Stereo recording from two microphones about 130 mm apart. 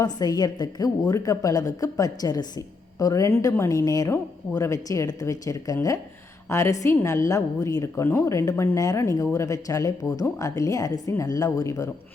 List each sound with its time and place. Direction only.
0.2 s a woman's voice: 30° left (ahead or behind)